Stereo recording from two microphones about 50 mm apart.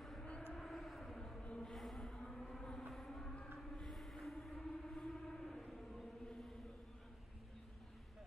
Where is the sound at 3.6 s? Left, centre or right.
Centre.